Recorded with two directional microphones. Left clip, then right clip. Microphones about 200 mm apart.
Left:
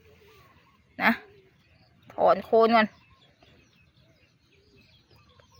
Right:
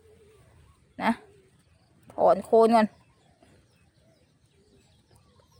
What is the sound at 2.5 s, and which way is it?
Speech, 25° right (ahead or behind).